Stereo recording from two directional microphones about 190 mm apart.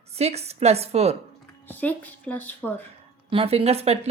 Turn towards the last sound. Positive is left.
turn(degrees=-35)  # may be behind; listen again after turning